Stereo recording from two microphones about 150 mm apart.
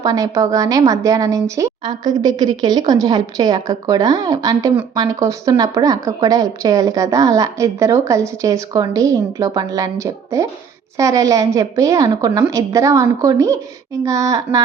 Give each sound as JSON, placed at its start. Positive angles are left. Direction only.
{"t": 0.0, "sound": "speech", "side_deg": -25}